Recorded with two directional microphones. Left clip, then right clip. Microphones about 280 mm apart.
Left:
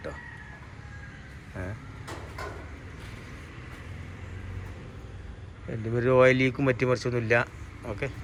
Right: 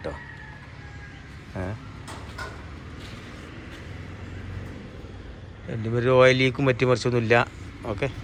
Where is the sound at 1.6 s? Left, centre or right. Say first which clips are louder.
Right 5 dB; centre.